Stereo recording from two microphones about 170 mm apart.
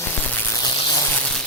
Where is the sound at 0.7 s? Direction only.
30° left (ahead or behind).